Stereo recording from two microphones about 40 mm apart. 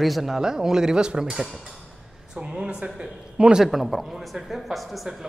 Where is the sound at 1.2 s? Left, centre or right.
Centre.